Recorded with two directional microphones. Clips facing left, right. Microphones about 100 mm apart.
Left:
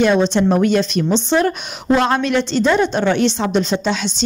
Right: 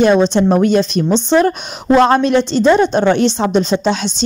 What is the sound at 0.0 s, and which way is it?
Speech, 30° right (ahead or behind).